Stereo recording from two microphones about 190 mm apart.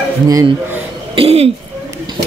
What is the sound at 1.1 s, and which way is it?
Throat clearing, 30° right (ahead or behind).